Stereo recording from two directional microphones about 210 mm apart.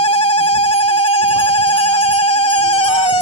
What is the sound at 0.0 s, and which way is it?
Ringtone, 30° left (ahead or behind).